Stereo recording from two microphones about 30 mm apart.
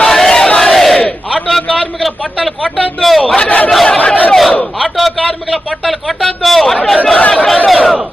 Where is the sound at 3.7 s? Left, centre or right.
Centre.